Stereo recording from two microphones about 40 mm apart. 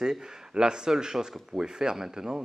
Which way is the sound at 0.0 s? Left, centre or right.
Centre.